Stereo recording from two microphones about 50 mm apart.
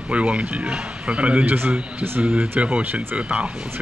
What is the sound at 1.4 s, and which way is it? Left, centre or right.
Speech, right.